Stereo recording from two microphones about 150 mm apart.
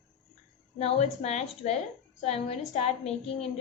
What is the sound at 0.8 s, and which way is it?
A woman's voice, 45° left (ahead or behind).